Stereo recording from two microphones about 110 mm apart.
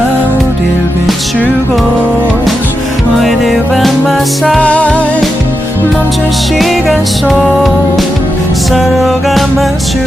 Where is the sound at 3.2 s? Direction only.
Centre (ahead or behind).